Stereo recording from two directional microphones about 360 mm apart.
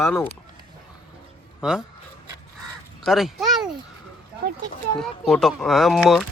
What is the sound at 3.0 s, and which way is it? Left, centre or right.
Speech, centre.